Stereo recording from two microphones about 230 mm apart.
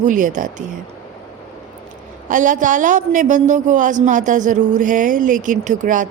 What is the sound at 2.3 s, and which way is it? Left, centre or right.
A woman's voice, right.